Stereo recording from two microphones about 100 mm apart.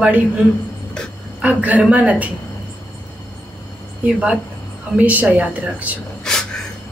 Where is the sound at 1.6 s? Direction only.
15° right (ahead or behind).